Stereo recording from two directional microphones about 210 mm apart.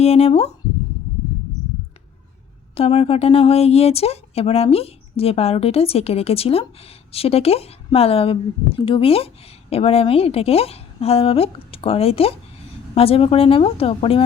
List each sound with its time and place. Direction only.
0.0 s speech: 30° left (ahead or behind)
2.7 s speech: 30° left (ahead or behind)